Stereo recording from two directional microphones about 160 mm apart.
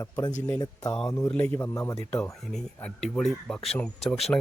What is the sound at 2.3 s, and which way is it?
Speech, centre (ahead or behind).